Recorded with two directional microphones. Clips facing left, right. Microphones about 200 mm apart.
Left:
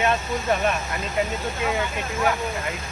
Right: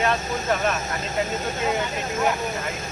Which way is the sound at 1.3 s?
40° right (ahead or behind).